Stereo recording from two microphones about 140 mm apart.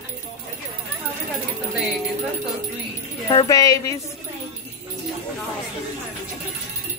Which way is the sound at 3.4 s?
25° left (ahead or behind).